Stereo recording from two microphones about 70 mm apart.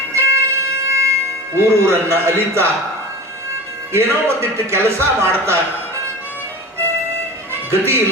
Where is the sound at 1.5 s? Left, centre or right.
Right.